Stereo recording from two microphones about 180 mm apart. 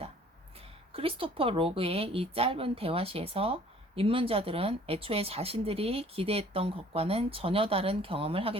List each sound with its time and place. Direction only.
0.9 s speech: 30° right (ahead or behind)